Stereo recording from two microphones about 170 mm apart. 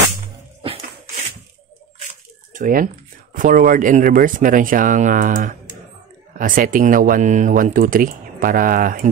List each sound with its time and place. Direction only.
2.5 s speech: 50° right (ahead or behind)